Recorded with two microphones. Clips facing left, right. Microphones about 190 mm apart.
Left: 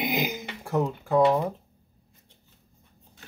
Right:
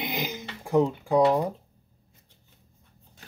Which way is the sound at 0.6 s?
15° right (ahead or behind).